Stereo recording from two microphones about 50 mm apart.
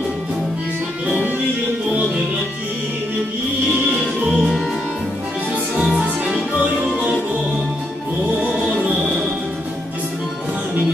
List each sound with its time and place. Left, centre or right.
1.0 s music: right
4.3 s music: centre
5.9 s music: right